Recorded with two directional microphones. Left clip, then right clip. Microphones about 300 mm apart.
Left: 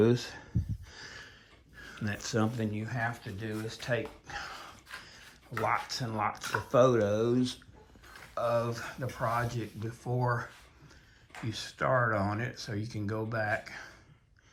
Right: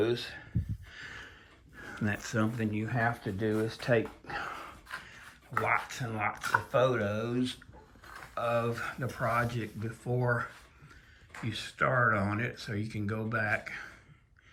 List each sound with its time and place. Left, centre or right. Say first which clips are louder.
1.8 s speech: right 3 dB; centre